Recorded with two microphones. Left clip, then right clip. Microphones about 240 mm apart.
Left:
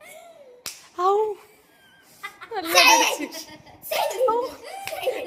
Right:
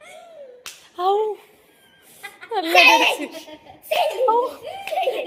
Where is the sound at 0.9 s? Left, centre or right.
Centre.